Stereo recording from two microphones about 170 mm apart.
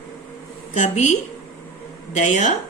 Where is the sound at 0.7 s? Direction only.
45° left (ahead or behind).